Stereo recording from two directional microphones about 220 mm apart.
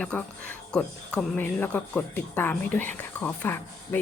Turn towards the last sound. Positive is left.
turn(degrees=10)  # may be behind; listen again after turning